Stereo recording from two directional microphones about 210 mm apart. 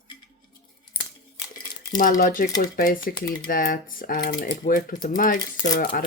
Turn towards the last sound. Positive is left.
turn(degrees=40)  # may be behind; listen again after turning